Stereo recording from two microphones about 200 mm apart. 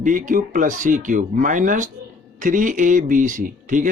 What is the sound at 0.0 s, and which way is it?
Speech, 40° right (ahead or behind).